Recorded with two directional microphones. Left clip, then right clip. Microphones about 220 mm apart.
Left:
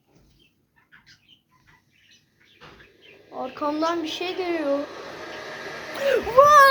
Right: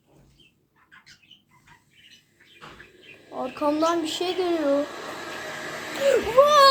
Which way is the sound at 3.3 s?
Centre (ahead or behind).